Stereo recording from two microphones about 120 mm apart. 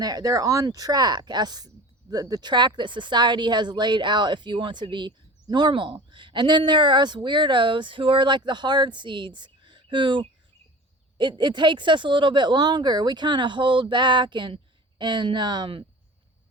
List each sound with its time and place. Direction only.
0.0 s speech: 30° right (ahead or behind)